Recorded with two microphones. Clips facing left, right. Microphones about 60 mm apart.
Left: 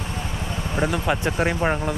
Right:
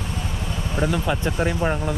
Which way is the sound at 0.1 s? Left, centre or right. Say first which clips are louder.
Even; centre.